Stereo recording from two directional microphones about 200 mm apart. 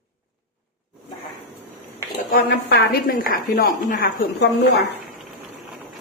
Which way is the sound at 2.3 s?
50° left (ahead or behind).